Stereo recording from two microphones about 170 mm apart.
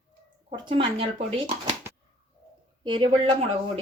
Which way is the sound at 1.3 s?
30° right (ahead or behind).